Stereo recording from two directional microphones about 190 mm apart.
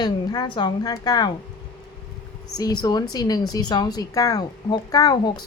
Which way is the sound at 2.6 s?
20° left (ahead or behind).